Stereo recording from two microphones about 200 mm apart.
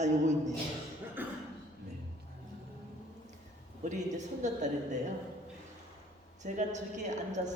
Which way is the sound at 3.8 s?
35° right (ahead or behind).